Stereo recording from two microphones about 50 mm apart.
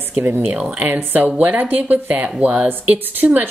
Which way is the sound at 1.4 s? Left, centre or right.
Right.